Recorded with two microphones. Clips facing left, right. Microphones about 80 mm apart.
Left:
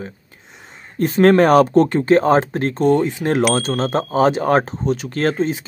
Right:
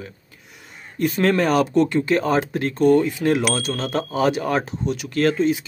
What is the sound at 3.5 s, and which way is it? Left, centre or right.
Speech, left.